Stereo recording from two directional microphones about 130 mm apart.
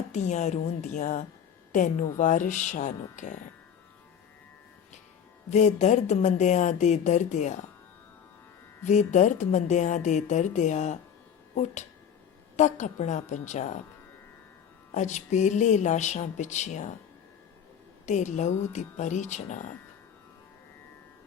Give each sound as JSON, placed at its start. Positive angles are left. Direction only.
{"t": 0.1, "sound": "speech", "side_deg": 60}
{"t": 5.5, "sound": "speech", "side_deg": 65}
{"t": 8.8, "sound": "speech", "side_deg": 65}
{"t": 14.9, "sound": "speech", "side_deg": 65}
{"t": 18.0, "sound": "speech", "side_deg": 65}